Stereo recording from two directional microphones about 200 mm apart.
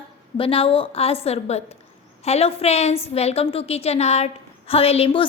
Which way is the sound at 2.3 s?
30° left (ahead or behind).